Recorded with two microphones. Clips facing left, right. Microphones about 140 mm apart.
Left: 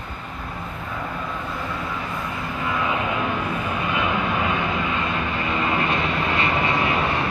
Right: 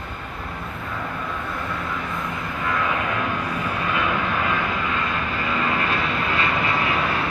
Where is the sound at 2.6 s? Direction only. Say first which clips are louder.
Even; 20° left (ahead or behind).